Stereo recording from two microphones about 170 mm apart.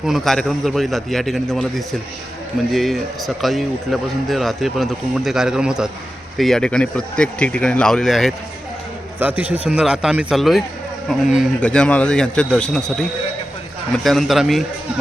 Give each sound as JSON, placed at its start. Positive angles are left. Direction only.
{"t": 0.0, "sound": "a man's voice", "side_deg": 0}